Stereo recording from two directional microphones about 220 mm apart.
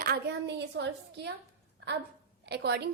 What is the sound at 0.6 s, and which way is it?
Speech, 50° right (ahead or behind).